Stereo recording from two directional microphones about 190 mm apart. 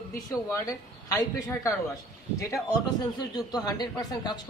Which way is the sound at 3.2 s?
20° left (ahead or behind).